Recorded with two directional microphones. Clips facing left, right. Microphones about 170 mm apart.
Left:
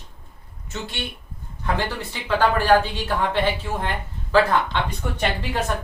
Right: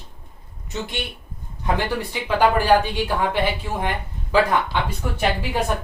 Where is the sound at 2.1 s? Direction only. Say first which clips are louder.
Right 2 dB; 15° right (ahead or behind).